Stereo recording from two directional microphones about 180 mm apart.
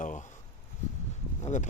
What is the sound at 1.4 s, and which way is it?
Speech, 40° left (ahead or behind).